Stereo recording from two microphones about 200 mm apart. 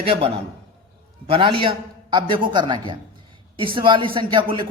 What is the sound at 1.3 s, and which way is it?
A man's voice, 25° right (ahead or behind).